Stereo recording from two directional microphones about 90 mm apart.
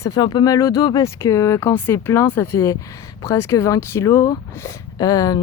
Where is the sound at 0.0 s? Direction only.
45° left (ahead or behind); by 4.3 s 30° left (ahead or behind).